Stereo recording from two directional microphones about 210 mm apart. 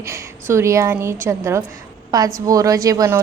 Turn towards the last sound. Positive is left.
turn(degrees=-15)  # may be behind; listen again after turning